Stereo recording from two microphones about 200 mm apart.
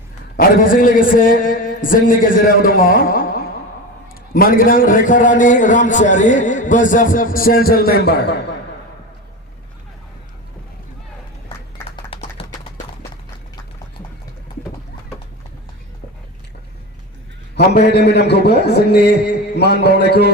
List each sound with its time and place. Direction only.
0.3 s a man's voice: 45° left (ahead or behind)
4.4 s a man's voice: 45° left (ahead or behind)
11.9 s a sound: 30° left (ahead or behind)
17.7 s a man's voice: 55° left (ahead or behind)